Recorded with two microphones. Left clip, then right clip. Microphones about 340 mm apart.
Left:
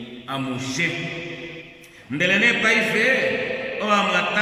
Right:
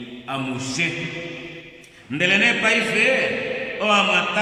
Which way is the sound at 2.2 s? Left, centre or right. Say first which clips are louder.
Even; centre.